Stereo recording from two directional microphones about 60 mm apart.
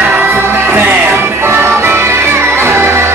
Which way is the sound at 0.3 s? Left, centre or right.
Right.